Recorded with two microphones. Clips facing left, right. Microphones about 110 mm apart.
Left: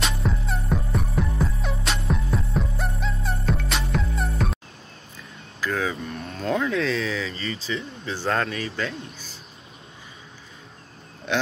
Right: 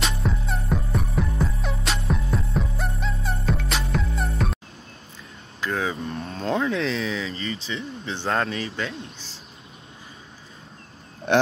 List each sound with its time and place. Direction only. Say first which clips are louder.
0.0 s music: even; centre (ahead or behind)
5.6 s a sound: even; 25° right (ahead or behind)
11.3 s speech: right 6 dB; 55° right (ahead or behind)